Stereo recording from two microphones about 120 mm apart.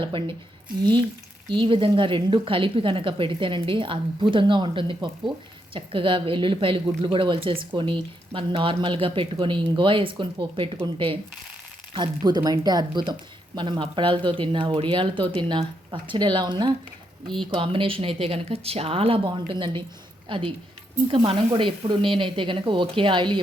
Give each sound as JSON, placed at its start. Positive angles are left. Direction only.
{"t": 0.0, "sound": "a woman's voice", "side_deg": -45}
{"t": 1.5, "sound": "a woman's voice", "side_deg": -45}
{"t": 11.9, "sound": "a woman's voice", "side_deg": -35}
{"t": 17.2, "sound": "speech", "side_deg": 5}
{"t": 17.5, "sound": "a woman's voice", "side_deg": -45}